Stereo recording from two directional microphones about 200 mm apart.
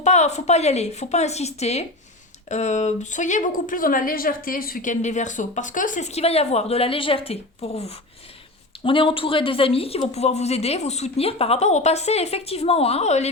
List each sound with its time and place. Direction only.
0.0 s a woman's voice: 35° left (ahead or behind)